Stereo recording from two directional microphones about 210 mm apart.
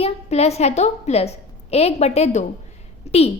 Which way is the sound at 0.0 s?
30° left (ahead or behind).